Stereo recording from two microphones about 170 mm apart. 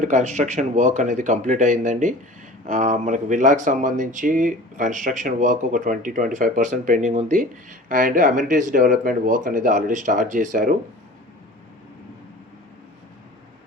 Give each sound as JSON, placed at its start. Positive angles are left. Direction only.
{"t": 0.0, "sound": "speech", "side_deg": -45}